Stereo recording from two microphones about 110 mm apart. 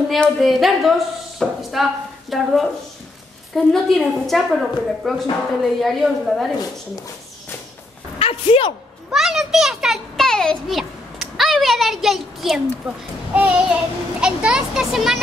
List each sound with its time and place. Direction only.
0.1 s a woman's voice: centre (ahead or behind)
8.2 s speech: 60° left (ahead or behind)
9.1 s a child's voice: 5° right (ahead or behind)